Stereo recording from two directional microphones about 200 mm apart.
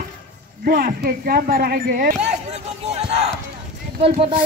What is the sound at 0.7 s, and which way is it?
Speech, 45° right (ahead or behind).